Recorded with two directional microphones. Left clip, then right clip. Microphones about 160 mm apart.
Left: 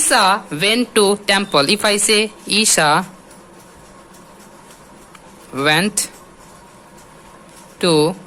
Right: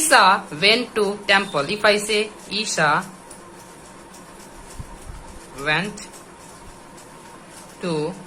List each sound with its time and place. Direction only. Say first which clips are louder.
0.1 s speech: even; 55° left (ahead or behind); by 3.0 s 75° left (ahead or behind)
5.5 s speech: left 7 dB; 80° left
7.8 s speech: left 11 dB; 75° left (ahead or behind)